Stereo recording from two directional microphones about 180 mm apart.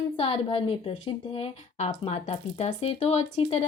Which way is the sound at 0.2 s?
30° left (ahead or behind).